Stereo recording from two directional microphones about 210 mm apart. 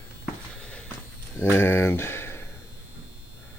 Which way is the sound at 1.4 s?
10° left (ahead or behind).